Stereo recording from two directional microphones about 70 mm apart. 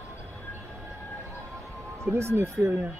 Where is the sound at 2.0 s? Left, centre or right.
Right.